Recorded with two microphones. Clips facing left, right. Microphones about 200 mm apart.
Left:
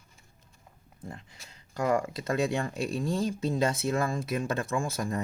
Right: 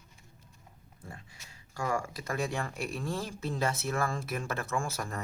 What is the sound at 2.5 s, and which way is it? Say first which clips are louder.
Speech: left 5 dB; 20° left (ahead or behind).